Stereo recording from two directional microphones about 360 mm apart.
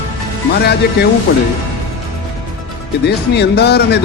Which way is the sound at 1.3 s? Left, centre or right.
Left.